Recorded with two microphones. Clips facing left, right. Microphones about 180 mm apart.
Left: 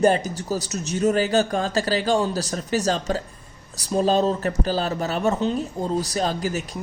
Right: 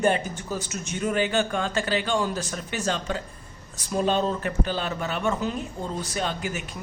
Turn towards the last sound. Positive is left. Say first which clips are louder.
# left 5 dB
turn(degrees=35)  # may be behind; listen again after turning